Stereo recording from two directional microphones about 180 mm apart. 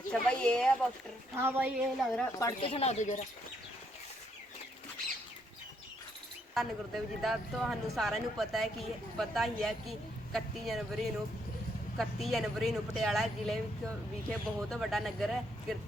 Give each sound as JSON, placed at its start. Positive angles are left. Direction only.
{"t": 0.1, "sound": "speech", "side_deg": 5}
{"t": 1.4, "sound": "a woman's voice", "side_deg": -10}
{"t": 2.6, "sound": "speech", "side_deg": 35}
{"t": 6.5, "sound": "speech", "side_deg": 0}